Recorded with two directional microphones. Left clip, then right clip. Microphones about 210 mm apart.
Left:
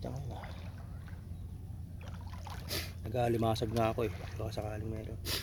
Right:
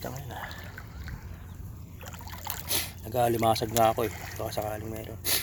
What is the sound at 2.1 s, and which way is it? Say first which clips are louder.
Boat: right 9 dB; 30° right (ahead or behind).